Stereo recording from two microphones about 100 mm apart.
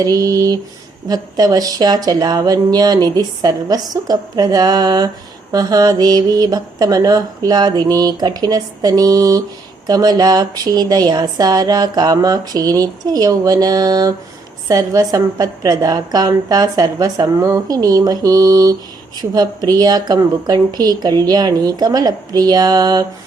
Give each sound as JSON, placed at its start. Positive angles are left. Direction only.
{"t": 0.0, "sound": "speech", "side_deg": -40}